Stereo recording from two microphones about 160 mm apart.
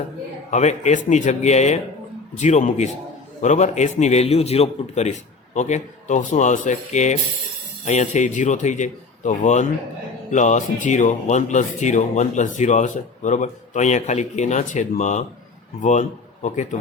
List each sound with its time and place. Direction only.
0.5 s speech: 45° left (ahead or behind)